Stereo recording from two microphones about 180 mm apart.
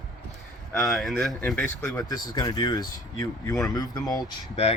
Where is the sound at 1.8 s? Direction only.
20° left (ahead or behind).